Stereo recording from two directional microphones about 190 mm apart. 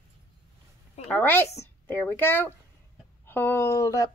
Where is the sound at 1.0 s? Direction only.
10° left (ahead or behind).